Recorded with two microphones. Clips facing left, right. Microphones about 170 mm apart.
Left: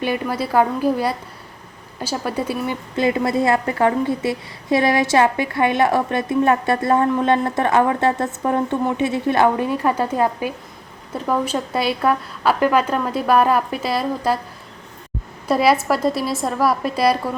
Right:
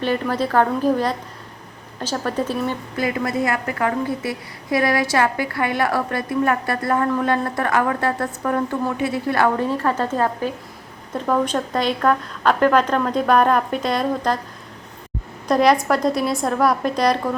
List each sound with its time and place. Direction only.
0.0 s a woman's voice: 10° left (ahead or behind)
2.9 s a woman's voice: 25° left (ahead or behind); by 14.3 s 5° left (ahead or behind)
15.4 s a woman's voice: 5° left (ahead or behind)